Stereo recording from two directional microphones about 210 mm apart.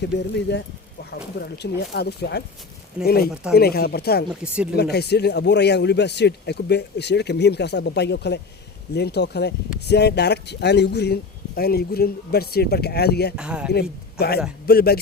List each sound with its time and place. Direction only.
0.0 s speech: 55° left (ahead or behind)
3.0 s speech: 5° right (ahead or behind)
3.5 s speech: 50° left (ahead or behind)
4.3 s speech: 5° right (ahead or behind)
4.8 s speech: 50° left (ahead or behind)
13.3 s speech: 5° right (ahead or behind)
14.2 s speech: 50° left (ahead or behind)